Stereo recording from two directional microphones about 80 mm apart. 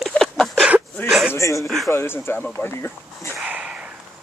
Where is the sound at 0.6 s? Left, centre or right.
Centre.